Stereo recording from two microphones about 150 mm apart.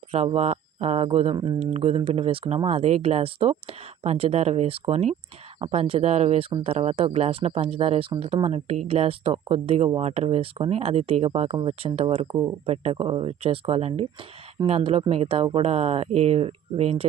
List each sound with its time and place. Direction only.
0.1 s speech: 40° right (ahead or behind)